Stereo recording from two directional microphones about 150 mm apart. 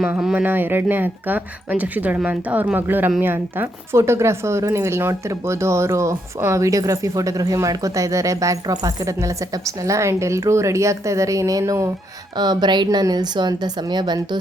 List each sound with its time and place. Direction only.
0.0 s speech: 5° right (ahead or behind); by 14.2 s 30° right (ahead or behind)